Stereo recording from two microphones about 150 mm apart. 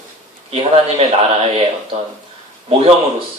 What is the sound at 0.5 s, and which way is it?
Speech, 45° right (ahead or behind).